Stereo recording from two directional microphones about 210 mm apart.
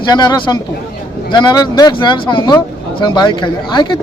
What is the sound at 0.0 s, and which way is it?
A man's voice, 20° left (ahead or behind).